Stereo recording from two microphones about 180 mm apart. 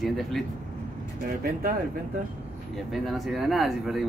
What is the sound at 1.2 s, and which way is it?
Speech, 55° right (ahead or behind).